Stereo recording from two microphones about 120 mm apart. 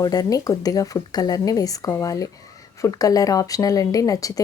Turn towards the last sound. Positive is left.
turn(degrees=30)  # may be behind; listen again after turning